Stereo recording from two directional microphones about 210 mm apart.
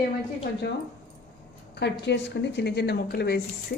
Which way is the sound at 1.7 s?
55° left (ahead or behind).